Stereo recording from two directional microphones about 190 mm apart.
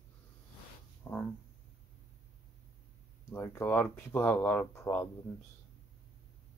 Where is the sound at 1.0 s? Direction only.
10° left (ahead or behind).